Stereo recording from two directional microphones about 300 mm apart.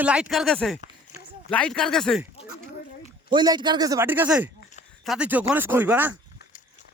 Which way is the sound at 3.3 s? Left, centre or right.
Centre.